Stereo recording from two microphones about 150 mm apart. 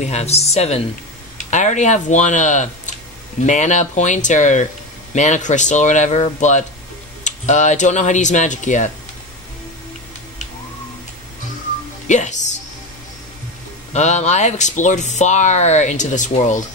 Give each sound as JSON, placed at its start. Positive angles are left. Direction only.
{"t": 0.0, "sound": "speech", "side_deg": 45}
{"t": 12.1, "sound": "speech", "side_deg": 55}
{"t": 13.9, "sound": "speech", "side_deg": 50}